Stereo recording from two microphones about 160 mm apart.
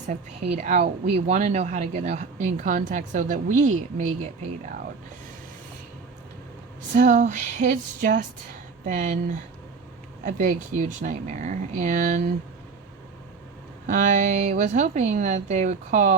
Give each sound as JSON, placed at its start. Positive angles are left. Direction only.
{"t": 0.4, "sound": "a woman's voice", "side_deg": -45}
{"t": 6.9, "sound": "a woman's voice", "side_deg": -55}
{"t": 10.2, "sound": "a woman's voice", "side_deg": -50}
{"t": 13.8, "sound": "a woman's voice", "side_deg": -50}